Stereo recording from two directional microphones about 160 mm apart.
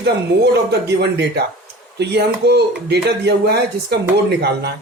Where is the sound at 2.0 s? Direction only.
90° right.